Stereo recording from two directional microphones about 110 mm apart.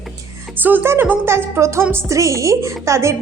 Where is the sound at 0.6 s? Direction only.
15° right (ahead or behind).